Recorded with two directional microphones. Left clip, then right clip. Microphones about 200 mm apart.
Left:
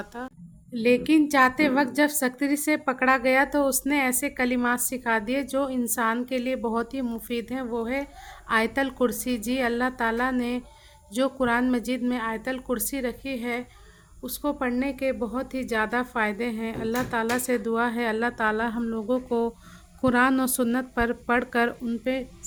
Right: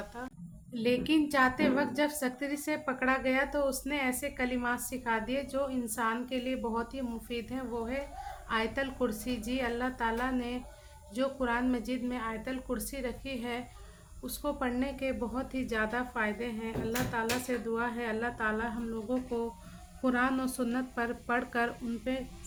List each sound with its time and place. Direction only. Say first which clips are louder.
0.7 s a woman's voice: left 8 dB; 35° left (ahead or behind)